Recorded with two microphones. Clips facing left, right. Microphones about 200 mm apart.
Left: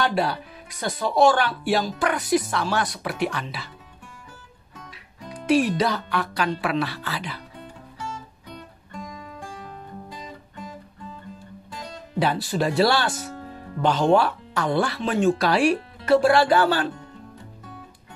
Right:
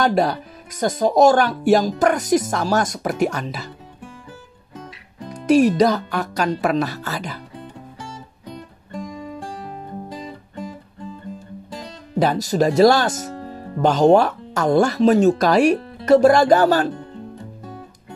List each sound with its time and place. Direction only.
0.0 s speech: 45° right (ahead or behind)
5.3 s speech: 45° right (ahead or behind)
10.1 s music: 35° right (ahead or behind)
11.7 s speech: 40° right (ahead or behind)